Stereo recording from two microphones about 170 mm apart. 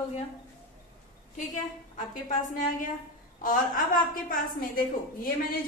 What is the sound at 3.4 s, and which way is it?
A woman's voice, 50° left (ahead or behind).